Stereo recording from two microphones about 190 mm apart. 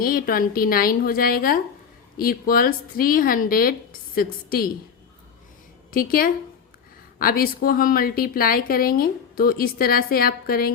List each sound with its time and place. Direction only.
0.0 s a woman's voice: 50° left (ahead or behind)
5.9 s a woman's voice: 50° left (ahead or behind)